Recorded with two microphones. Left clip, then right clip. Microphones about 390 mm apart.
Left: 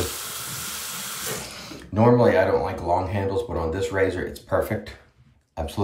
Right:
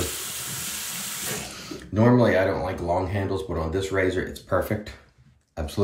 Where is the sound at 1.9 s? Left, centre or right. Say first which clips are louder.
Left 2 dB; centre.